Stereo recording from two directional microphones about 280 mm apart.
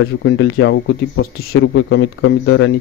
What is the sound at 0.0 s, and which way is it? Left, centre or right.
Speech, left.